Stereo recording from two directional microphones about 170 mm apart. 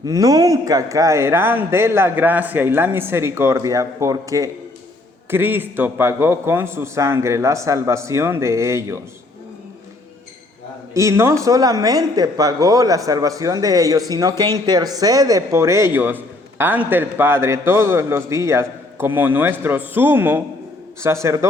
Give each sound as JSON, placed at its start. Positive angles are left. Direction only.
{"t": 0.0, "sound": "speech", "side_deg": -20}
{"t": 10.9, "sound": "speech", "side_deg": -15}